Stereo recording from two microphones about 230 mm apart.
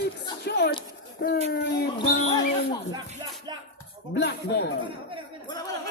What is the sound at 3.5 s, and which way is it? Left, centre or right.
Speech, centre.